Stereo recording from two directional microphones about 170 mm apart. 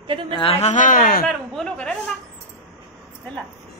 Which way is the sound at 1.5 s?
5° left (ahead or behind).